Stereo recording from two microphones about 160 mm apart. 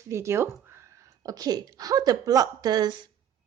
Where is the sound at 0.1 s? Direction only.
15° right (ahead or behind).